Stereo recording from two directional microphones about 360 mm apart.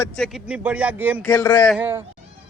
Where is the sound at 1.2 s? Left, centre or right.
Centre.